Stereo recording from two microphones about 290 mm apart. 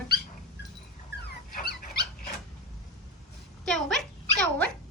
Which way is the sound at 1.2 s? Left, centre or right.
Left.